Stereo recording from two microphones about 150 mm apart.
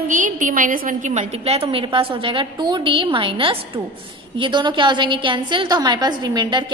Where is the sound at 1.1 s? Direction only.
45° right (ahead or behind).